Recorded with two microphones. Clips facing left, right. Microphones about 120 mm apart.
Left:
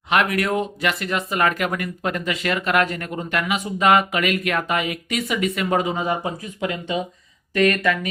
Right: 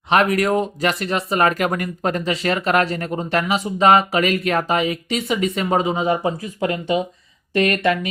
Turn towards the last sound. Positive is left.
turn(degrees=-30)  # may be behind; listen again after turning